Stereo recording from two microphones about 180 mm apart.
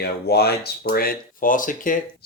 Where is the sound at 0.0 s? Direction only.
60° left (ahead or behind).